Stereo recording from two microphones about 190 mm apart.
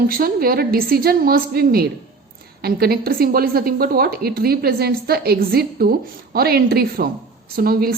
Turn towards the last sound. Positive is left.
turn(degrees=-50)  # may be behind; listen again after turning